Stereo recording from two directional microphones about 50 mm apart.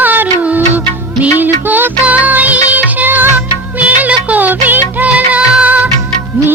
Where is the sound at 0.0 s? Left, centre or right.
Right.